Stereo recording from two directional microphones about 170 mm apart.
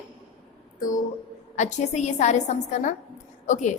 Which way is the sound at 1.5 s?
45° left (ahead or behind).